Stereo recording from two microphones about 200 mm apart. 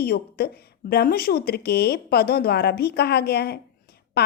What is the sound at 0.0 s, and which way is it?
Speech, 50° left (ahead or behind).